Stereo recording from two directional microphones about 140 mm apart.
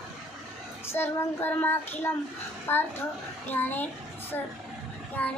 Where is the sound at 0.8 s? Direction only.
15° left (ahead or behind).